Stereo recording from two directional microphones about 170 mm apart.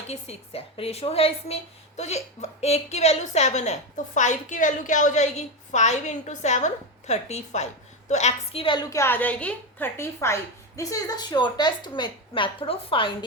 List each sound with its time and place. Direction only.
0.1 s a woman's voice: 35° left (ahead or behind)